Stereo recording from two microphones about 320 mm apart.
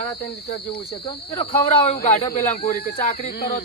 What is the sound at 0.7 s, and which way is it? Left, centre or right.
Speech, centre.